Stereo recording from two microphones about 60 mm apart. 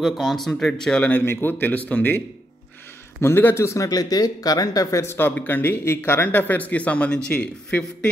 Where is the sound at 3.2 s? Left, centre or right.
Left.